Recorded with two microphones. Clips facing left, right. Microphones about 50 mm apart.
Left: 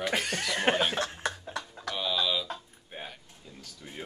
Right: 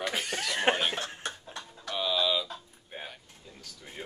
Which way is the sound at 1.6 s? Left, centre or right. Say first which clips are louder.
Left 6 dB; left.